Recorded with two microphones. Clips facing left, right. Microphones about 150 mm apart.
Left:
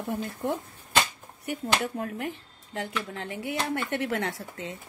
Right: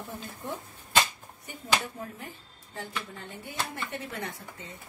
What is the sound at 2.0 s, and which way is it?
Speech, 70° left (ahead or behind).